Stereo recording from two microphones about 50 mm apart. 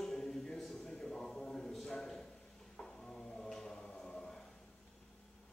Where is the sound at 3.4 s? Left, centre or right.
Centre.